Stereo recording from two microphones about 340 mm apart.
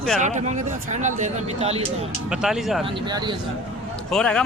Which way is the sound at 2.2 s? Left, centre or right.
Centre.